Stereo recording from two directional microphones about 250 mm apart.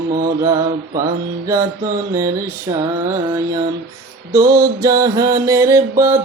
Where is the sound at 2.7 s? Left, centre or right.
Centre.